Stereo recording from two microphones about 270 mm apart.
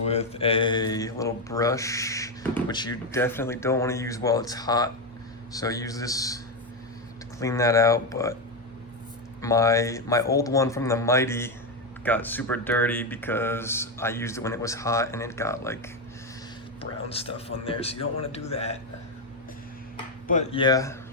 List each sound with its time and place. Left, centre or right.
0.1 s speech: left
9.4 s speech: centre
16.8 s speech: left
20.2 s speech: left